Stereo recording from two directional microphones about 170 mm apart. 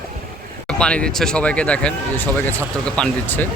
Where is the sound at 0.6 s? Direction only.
5° left (ahead or behind).